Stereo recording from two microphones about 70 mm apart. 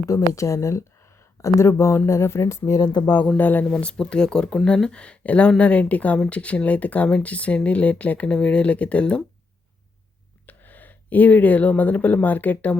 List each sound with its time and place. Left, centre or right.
0.3 s speech: left
3.3 s speech: left
3.7 s speech: centre
10.4 s speech: left